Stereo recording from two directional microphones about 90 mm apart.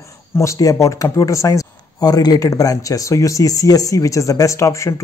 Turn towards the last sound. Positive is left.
turn(degrees=35)  # may be behind; listen again after turning